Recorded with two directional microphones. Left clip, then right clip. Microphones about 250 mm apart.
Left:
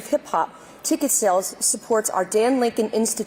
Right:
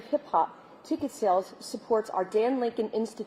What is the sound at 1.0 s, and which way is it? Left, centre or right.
A woman's voice, left.